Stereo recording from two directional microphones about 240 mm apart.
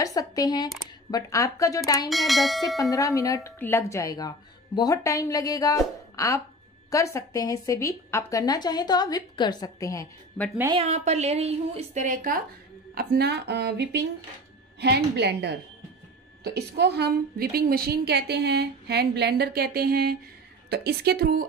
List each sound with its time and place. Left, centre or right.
0.0 s a woman's voice: centre
2.0 s speech: centre
2.8 s a woman's voice: centre
10.6 s a woman's voice: right